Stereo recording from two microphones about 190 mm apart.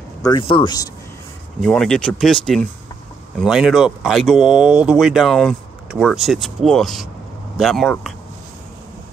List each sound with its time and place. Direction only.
0.2 s speech: 25° left (ahead or behind)
1.6 s speech: 5° left (ahead or behind)